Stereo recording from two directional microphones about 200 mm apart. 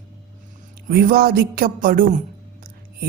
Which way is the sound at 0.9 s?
50° right (ahead or behind).